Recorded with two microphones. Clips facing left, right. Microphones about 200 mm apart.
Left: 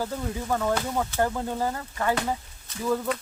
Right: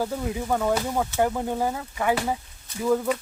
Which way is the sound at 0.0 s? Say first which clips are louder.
Right 3 dB; 15° right (ahead or behind).